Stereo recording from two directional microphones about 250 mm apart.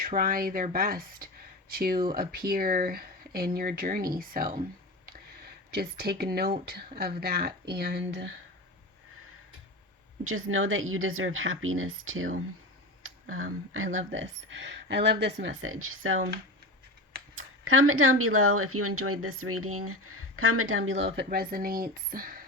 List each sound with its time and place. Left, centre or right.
0.0 s speech: right
10.2 s speech: right
17.3 s speech: right
21.2 s speech: right